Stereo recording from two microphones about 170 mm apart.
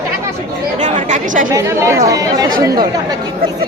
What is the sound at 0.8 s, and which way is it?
Speech, 45° right (ahead or behind).